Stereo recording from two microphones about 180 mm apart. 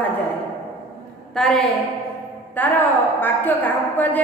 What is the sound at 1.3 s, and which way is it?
A woman's voice, 5° left (ahead or behind).